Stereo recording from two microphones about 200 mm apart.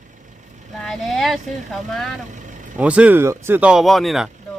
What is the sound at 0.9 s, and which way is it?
Speech, centre (ahead or behind).